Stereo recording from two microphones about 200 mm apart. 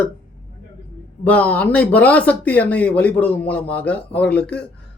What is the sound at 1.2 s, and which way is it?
Speech, 5° left (ahead or behind).